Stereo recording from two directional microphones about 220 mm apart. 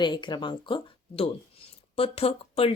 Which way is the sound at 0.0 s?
20° left (ahead or behind).